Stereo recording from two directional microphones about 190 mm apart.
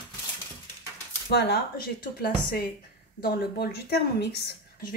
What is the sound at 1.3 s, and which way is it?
A woman's voice, 60° left (ahead or behind).